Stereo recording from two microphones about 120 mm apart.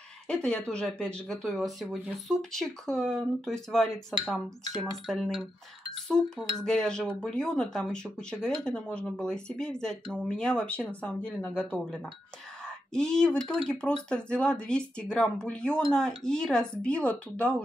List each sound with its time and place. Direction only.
0.3 s speech: 5° left (ahead or behind)